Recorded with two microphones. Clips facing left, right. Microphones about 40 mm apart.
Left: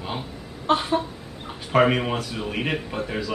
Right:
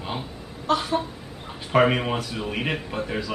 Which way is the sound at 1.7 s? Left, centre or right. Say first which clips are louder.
Even; centre.